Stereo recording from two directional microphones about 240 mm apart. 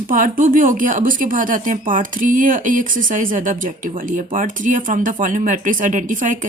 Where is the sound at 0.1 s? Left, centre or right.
Right.